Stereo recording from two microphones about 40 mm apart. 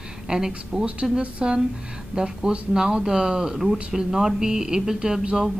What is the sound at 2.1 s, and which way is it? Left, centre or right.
A woman's voice, centre.